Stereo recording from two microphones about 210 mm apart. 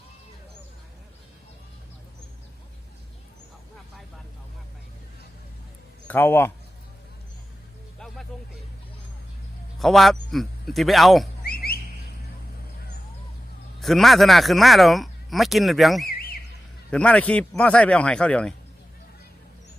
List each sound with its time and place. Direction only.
6.1 s speech: 10° left (ahead or behind)
7.9 s music: centre (ahead or behind)
9.7 s speech: centre (ahead or behind)
11.4 s a sound: 45° left (ahead or behind)
13.7 s speech: centre (ahead or behind)
16.0 s a sound: 45° left (ahead or behind)
16.9 s speech: 5° left (ahead or behind)